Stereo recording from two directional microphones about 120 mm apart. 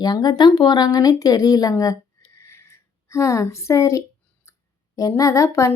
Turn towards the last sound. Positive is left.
turn(degrees=25)  # may be behind; listen again after turning